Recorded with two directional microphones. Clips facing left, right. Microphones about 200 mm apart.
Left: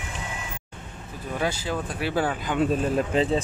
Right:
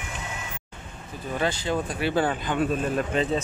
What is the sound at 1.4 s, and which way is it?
Speech, 5° left (ahead or behind).